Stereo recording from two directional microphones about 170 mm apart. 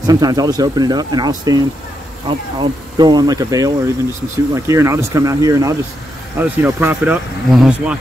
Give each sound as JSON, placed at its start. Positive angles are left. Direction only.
{"t": 0.0, "sound": "speech", "side_deg": -25}